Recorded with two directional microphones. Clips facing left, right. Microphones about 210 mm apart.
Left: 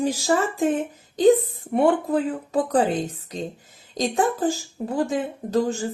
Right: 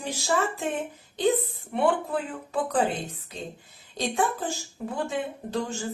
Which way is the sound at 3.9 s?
40° left (ahead or behind).